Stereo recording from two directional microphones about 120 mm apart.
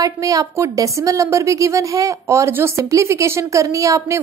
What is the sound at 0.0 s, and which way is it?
A woman's voice, 25° right (ahead or behind).